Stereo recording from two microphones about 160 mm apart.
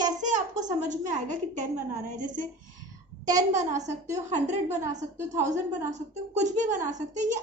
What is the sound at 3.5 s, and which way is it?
Speech, 50° right (ahead or behind).